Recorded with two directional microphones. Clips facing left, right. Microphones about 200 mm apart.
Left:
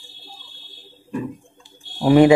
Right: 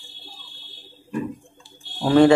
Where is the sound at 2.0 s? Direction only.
15° left (ahead or behind).